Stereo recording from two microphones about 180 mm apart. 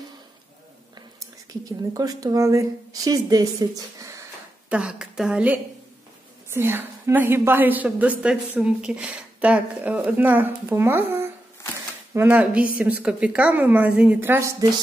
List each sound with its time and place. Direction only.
1.5 s speech: 20° right (ahead or behind)
4.7 s a woman's voice: 5° right (ahead or behind)